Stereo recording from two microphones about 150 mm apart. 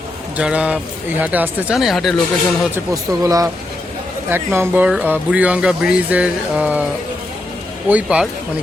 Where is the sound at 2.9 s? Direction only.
25° right (ahead or behind).